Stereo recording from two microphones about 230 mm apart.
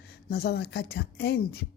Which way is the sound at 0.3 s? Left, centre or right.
Left.